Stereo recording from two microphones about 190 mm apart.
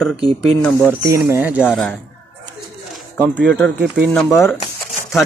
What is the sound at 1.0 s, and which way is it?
Speech, 15° right (ahead or behind).